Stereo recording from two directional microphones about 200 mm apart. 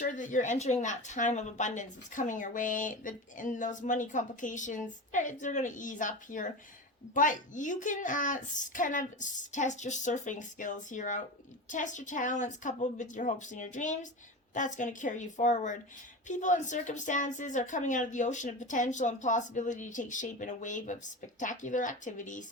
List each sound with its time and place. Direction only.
0.0 s a woman's voice: 40° left (ahead or behind)